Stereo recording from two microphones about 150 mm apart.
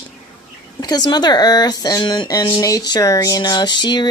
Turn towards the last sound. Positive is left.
turn(degrees=30)  # may be behind; listen again after turning